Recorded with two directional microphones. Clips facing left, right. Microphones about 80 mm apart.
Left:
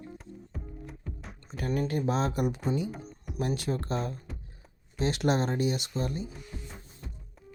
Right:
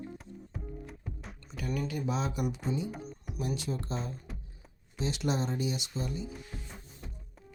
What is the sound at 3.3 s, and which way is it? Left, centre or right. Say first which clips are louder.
Speech: left 4 dB; left.